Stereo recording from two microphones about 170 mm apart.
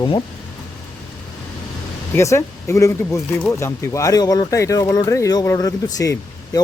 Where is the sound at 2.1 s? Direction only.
15° left (ahead or behind).